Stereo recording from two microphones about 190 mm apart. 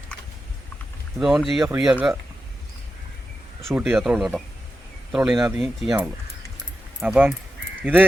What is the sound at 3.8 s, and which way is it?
Speech, 5° right (ahead or behind).